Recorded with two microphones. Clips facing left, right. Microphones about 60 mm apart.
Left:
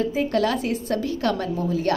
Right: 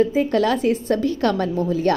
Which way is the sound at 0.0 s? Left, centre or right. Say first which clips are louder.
Right 4 dB; right.